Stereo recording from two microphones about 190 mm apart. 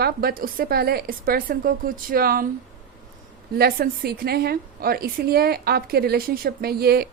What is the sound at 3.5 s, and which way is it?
A woman's voice, 55° right (ahead or behind).